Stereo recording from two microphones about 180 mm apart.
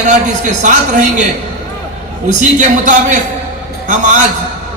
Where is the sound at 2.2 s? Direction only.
45° right (ahead or behind).